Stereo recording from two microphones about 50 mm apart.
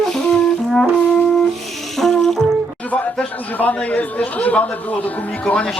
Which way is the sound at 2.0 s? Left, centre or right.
Centre.